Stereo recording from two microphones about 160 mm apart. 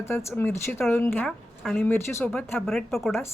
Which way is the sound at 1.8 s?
15° left (ahead or behind).